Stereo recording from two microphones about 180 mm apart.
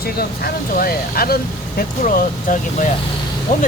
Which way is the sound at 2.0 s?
45° left (ahead or behind).